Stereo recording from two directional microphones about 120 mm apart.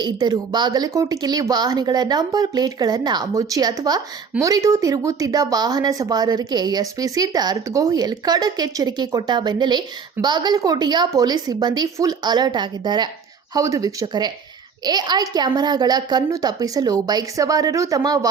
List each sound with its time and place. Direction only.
0.0 s speech: 35° right (ahead or behind)